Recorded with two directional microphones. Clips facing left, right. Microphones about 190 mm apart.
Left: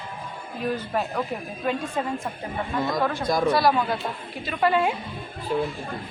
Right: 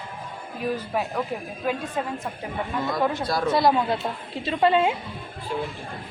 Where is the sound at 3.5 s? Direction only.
20° right (ahead or behind).